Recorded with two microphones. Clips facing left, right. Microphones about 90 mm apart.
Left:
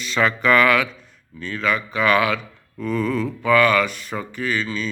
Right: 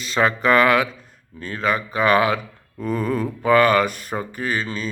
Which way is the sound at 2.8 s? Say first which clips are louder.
Even; 45° right (ahead or behind).